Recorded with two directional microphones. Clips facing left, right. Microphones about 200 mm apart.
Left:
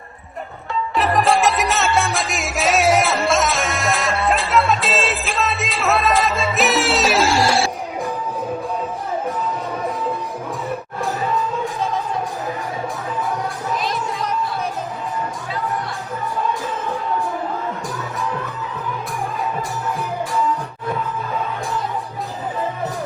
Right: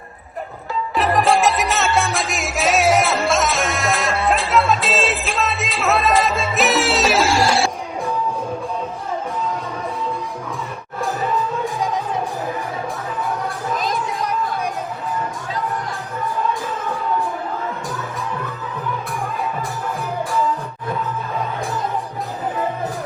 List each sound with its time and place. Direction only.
0.9 s music: centre (ahead or behind)